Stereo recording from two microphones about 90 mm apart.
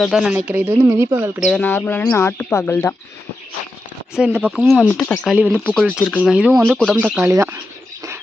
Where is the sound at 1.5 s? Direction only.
20° left (ahead or behind).